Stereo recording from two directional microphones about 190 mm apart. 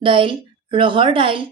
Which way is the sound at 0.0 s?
25° right (ahead or behind).